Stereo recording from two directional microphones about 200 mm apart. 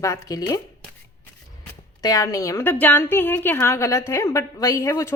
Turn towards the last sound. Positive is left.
turn(degrees=15)  # may be behind; listen again after turning